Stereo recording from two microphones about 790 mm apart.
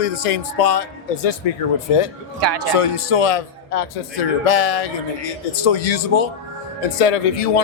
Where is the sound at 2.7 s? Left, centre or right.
Left.